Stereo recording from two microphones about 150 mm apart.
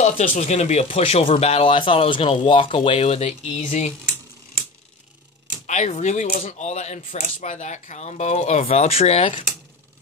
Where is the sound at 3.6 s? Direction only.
55° left (ahead or behind).